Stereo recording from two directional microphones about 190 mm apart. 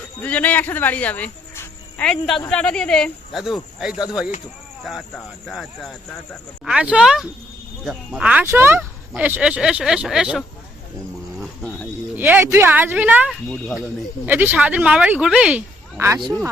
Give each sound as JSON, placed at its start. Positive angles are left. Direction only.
{"t": 0.2, "sound": "speech", "side_deg": 5}
{"t": 12.1, "sound": "speech", "side_deg": -10}
{"t": 16.0, "sound": "speech", "side_deg": -15}